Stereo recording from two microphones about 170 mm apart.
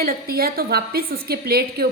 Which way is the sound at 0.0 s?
60° right (ahead or behind).